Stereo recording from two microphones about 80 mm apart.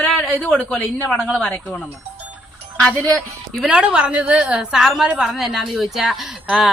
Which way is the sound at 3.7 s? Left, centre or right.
Centre.